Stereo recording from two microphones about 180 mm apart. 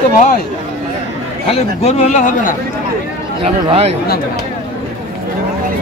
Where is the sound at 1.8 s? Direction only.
40° left (ahead or behind).